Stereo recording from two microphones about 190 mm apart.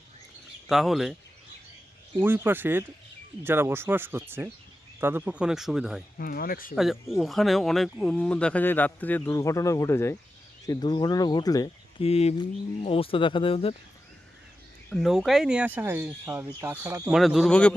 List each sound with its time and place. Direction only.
0.7 s speech: centre (ahead or behind)
2.1 s speech: 10° right (ahead or behind)
6.1 s speech: 50° left (ahead or behind)
6.7 s speech: centre (ahead or behind); by 12.0 s 20° left (ahead or behind)
12.0 s speech: 30° left (ahead or behind)
14.8 s speech: centre (ahead or behind)